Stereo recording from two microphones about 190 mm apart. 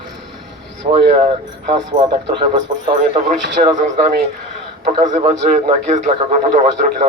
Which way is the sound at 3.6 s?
35° right (ahead or behind).